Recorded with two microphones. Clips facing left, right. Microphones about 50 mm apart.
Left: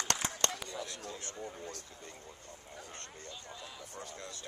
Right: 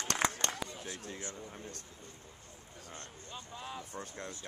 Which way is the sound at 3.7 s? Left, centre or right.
Right.